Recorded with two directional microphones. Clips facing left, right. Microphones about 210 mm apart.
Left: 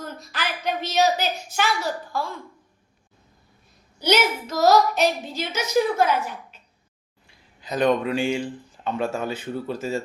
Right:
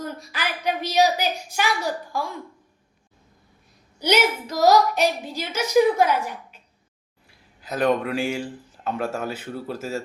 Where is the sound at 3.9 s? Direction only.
10° right (ahead or behind).